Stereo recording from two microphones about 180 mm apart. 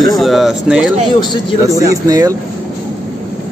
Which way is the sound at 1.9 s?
20° right (ahead or behind).